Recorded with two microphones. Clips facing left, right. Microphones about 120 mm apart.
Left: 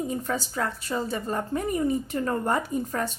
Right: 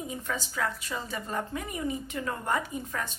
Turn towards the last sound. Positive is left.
turn(degrees=35)  # may be behind; listen again after turning